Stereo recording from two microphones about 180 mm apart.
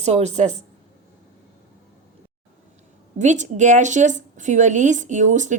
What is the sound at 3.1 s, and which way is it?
A woman's voice, 40° right (ahead or behind).